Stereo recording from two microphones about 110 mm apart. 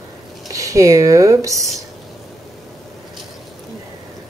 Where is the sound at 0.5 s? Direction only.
30° right (ahead or behind).